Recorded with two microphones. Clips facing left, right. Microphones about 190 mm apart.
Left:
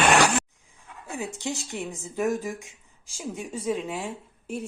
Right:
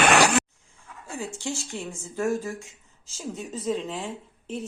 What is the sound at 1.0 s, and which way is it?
Speech, 15° left (ahead or behind).